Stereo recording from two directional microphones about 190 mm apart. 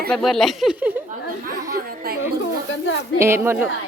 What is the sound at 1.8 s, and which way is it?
Speech, 50° right (ahead or behind).